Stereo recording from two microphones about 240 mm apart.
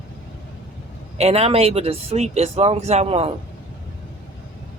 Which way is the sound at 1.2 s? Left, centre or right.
Right.